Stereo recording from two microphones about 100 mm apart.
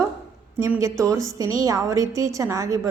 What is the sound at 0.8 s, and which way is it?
A woman's voice, 30° right (ahead or behind).